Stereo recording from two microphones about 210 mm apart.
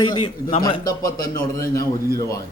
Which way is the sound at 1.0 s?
45° left (ahead or behind).